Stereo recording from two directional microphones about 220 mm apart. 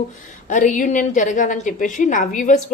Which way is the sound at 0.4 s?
35° left (ahead or behind).